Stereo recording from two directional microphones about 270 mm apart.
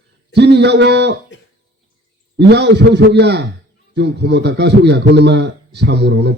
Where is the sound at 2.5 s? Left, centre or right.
Right.